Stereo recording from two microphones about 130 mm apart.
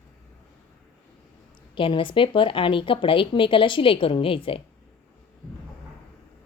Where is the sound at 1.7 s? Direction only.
40° left (ahead or behind).